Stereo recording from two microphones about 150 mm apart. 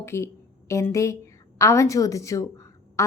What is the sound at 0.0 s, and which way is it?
A woman's voice, 15° left (ahead or behind).